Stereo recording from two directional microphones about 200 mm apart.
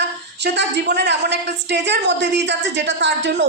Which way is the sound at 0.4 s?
60° right (ahead or behind).